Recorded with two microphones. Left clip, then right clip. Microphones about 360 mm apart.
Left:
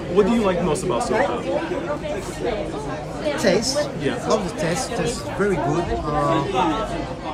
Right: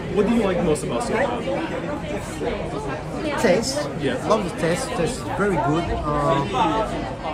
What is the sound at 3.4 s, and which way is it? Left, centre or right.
Speech, centre.